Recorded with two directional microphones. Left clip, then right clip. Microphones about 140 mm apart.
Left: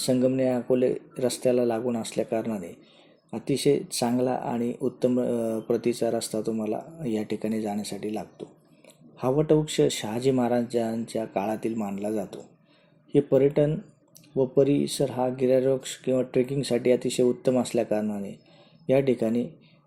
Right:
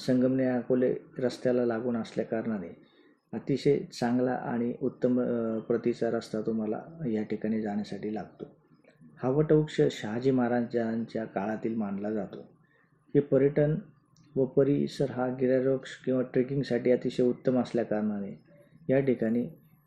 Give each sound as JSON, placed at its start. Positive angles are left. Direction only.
{"t": 0.0, "sound": "speech", "side_deg": 25}